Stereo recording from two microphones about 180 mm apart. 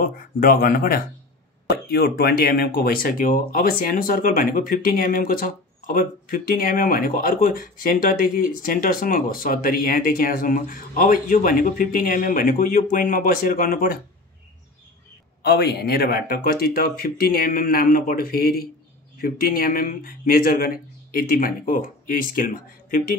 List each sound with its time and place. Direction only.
0.0 s speech: 50° left (ahead or behind)
15.4 s speech: 60° left (ahead or behind)